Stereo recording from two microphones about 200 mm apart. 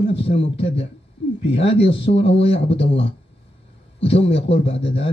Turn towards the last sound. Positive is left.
turn(degrees=30)  # may be behind; listen again after turning